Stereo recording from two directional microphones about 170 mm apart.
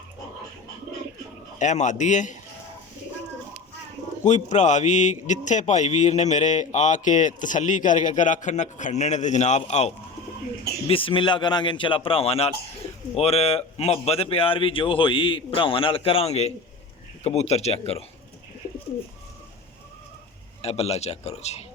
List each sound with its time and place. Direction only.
1.5 s a man's voice: 45° left (ahead or behind)
4.2 s a man's voice: 45° left (ahead or behind)
20.6 s speech: 35° left (ahead or behind)